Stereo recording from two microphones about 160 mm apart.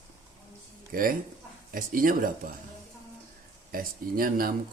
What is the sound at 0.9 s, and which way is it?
Speech, 65° right (ahead or behind).